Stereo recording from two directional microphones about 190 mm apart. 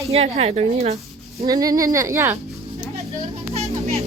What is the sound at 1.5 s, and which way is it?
Speech, 20° right (ahead or behind).